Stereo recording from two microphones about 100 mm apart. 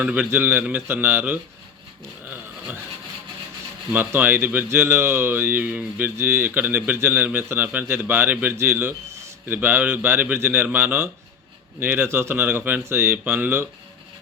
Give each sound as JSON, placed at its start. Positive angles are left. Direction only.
{"t": 0.0, "sound": "speech", "side_deg": -15}
{"t": 2.2, "sound": "a sound", "side_deg": -20}
{"t": 3.9, "sound": "speech", "side_deg": -20}